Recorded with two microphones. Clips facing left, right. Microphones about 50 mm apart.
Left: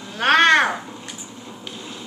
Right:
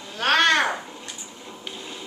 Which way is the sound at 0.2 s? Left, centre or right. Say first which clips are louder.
Left 4 dB; left.